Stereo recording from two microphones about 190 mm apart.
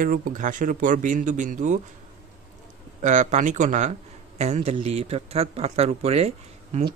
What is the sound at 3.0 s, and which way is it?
A man's voice, 40° right (ahead or behind).